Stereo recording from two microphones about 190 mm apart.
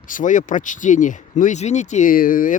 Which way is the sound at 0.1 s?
45° left (ahead or behind).